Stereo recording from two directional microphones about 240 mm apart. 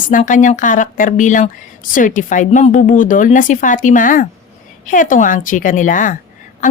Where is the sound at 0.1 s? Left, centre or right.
Left.